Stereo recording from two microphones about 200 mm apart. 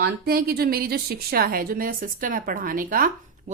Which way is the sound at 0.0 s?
50° right (ahead or behind).